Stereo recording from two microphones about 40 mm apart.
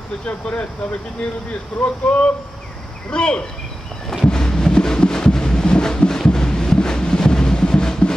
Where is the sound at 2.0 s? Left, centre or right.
Left.